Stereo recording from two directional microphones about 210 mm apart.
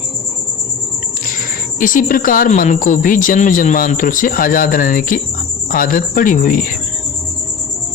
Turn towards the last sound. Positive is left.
turn(degrees=40)  # may be behind; listen again after turning